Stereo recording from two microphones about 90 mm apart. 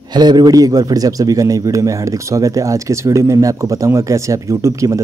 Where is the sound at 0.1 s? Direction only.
50° right (ahead or behind).